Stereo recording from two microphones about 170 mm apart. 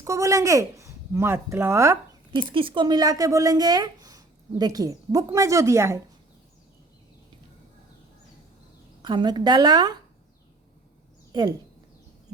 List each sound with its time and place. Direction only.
0.0 s speech: 15° right (ahead or behind)
2.3 s speech: 30° right (ahead or behind)
9.0 s speech: 25° right (ahead or behind)
11.3 s speech: 25° right (ahead or behind)